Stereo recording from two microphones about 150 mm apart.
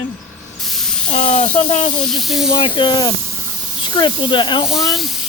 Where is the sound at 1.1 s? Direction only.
55° left (ahead or behind).